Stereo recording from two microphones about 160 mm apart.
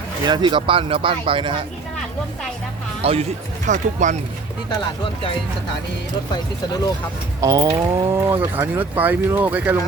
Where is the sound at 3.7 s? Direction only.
50° right (ahead or behind).